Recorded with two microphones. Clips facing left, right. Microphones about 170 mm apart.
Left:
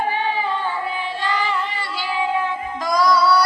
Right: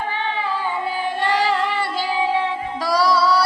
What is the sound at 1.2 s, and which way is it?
Child singing, 75° right (ahead or behind).